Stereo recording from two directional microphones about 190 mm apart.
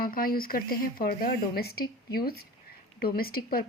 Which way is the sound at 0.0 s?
50° left (ahead or behind).